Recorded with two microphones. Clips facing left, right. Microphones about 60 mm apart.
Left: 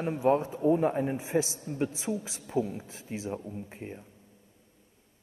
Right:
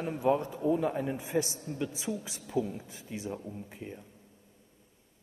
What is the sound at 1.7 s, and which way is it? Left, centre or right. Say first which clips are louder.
A man's voice: left 4 dB; left.